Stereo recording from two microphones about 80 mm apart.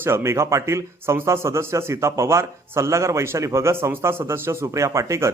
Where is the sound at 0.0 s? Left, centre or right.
Right.